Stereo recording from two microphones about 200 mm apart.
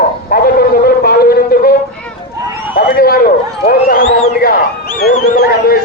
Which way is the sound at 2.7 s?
50° left (ahead or behind).